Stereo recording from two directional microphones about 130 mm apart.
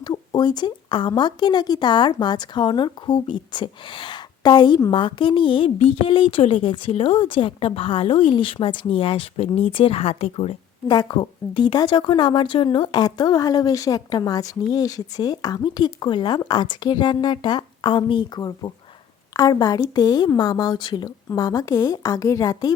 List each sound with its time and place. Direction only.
0.0 s a woman's voice: 35° left (ahead or behind); by 10.5 s 50° left (ahead or behind)
10.8 s a woman's voice: 35° left (ahead or behind)